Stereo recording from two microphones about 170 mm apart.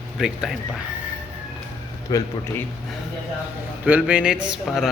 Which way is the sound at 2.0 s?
20° left (ahead or behind).